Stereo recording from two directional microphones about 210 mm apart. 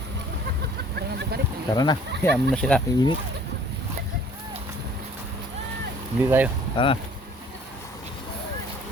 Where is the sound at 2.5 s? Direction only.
5° left (ahead or behind).